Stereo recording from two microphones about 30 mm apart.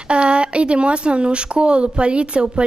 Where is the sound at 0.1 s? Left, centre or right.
Right.